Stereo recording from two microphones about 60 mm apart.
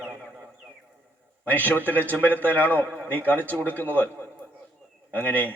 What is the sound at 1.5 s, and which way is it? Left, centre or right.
A man's voice, left.